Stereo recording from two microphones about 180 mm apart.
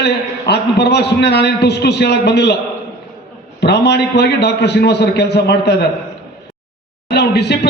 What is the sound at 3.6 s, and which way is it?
A man's voice, 70° left (ahead or behind).